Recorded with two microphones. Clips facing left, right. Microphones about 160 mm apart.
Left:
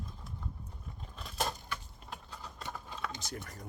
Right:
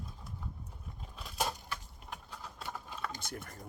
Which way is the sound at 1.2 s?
5° right (ahead or behind).